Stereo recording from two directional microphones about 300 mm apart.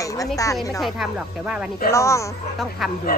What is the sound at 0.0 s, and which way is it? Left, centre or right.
Speech, centre.